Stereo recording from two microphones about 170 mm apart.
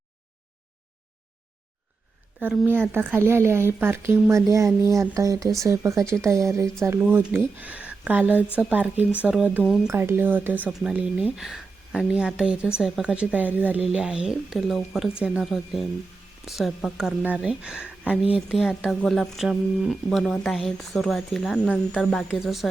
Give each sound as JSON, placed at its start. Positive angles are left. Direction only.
{"t": 2.4, "sound": "speech", "side_deg": -10}
{"t": 9.8, "sound": "speech", "side_deg": -15}